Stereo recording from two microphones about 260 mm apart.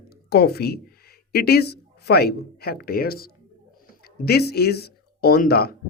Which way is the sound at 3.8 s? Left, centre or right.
Left.